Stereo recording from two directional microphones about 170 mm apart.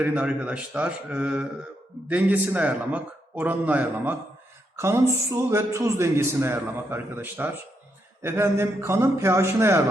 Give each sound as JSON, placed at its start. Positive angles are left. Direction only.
{"t": 0.0, "sound": "a man's voice", "side_deg": -5}